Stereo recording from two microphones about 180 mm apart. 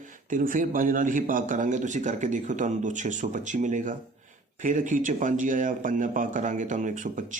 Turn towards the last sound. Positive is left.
turn(degrees=-45)  # may be behind; listen again after turning